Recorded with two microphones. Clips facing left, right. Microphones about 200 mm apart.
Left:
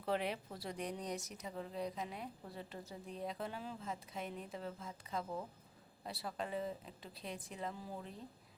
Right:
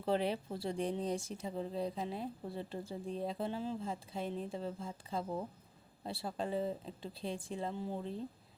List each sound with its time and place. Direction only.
0.0 s speech: 30° right (ahead or behind)